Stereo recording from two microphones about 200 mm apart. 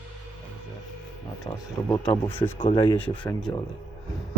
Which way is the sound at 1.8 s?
15° left (ahead or behind).